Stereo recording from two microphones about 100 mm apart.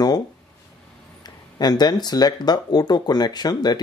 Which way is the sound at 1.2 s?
45° left (ahead or behind).